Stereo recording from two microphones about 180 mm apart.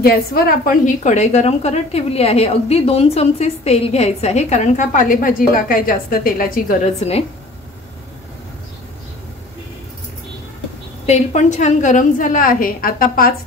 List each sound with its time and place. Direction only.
0.0 s a woman's voice: 60° left (ahead or behind); by 7.2 s 35° left (ahead or behind)
11.1 s a woman's voice: 40° left (ahead or behind)